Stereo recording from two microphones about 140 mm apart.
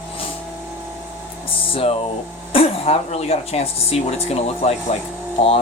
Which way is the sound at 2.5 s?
45° left (ahead or behind).